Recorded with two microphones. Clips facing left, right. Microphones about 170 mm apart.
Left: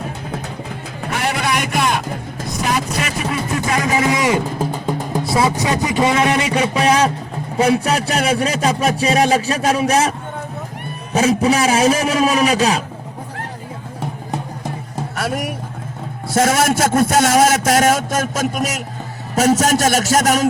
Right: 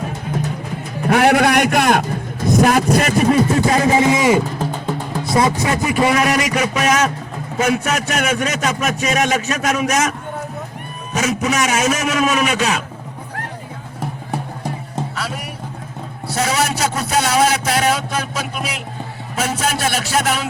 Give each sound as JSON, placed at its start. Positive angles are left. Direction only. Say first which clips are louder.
{"t": 1.1, "sound": "a man's voice", "louder": "right 8 dB", "side_deg": -60}
{"t": 5.2, "sound": "music", "louder": "right 2 dB", "side_deg": 5}
{"t": 5.6, "sound": "a man's voice", "louder": "even", "side_deg": 20}
{"t": 15.1, "sound": "vehicle", "louder": "left 5 dB", "side_deg": 50}
{"t": 16.3, "sound": "a man's voice", "louder": "left 4 dB", "side_deg": 50}